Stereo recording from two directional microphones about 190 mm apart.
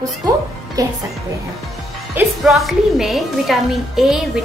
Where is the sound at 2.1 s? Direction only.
Centre (ahead or behind).